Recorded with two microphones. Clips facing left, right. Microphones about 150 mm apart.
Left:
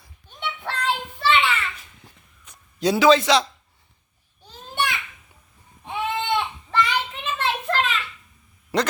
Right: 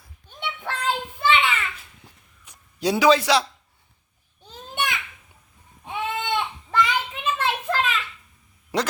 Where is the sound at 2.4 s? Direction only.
10° right (ahead or behind).